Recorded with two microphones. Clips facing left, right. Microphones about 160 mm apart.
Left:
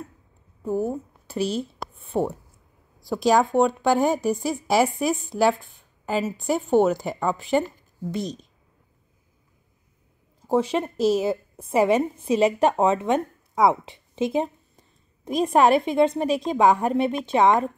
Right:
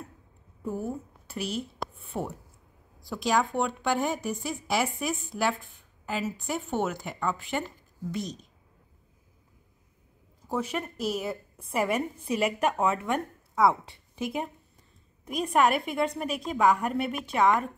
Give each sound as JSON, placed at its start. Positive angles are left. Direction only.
{"t": 0.7, "sound": "a woman's voice", "side_deg": 30}
{"t": 1.8, "sound": "a sound", "side_deg": 0}
{"t": 3.0, "sound": "speech", "side_deg": 35}
{"t": 10.4, "sound": "speech", "side_deg": 30}